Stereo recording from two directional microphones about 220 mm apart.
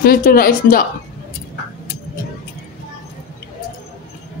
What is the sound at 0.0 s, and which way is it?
Speech, 40° left (ahead or behind).